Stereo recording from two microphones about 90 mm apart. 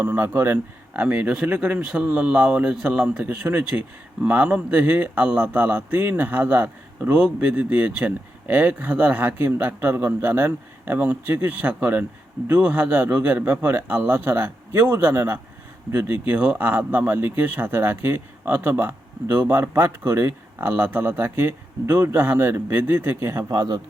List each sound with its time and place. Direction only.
0.0 s speech: 25° right (ahead or behind)
23.5 s speech: 45° right (ahead or behind)